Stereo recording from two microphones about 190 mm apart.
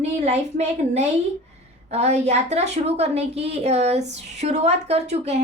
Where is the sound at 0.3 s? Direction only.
35° right (ahead or behind).